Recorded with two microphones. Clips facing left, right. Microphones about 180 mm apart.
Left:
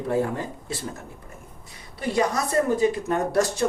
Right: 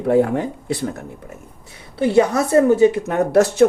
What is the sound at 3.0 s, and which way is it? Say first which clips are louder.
Speech: right 7 dB; 70° right (ahead or behind).